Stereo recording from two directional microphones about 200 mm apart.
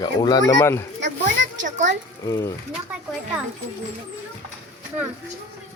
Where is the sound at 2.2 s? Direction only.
15° left (ahead or behind).